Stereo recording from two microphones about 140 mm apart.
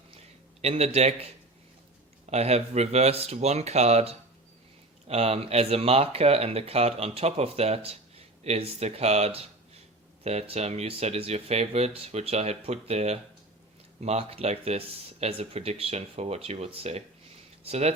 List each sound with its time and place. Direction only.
0.6 s speech: 50° right (ahead or behind)
2.3 s speech: 50° right (ahead or behind)